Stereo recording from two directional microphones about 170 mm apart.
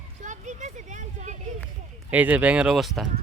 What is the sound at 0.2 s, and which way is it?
Speech, 45° right (ahead or behind).